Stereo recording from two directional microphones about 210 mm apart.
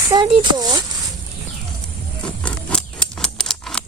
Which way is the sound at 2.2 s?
5° left (ahead or behind).